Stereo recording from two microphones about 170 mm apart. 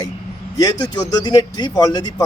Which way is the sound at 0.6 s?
25° left (ahead or behind).